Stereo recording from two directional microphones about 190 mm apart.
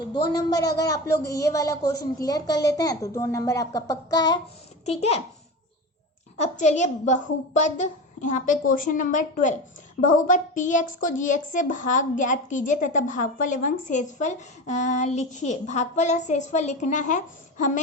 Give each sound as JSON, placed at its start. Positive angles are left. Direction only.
{"t": 0.1, "sound": "speech", "side_deg": 20}
{"t": 4.9, "sound": "speech", "side_deg": 35}
{"t": 6.3, "sound": "speech", "side_deg": 40}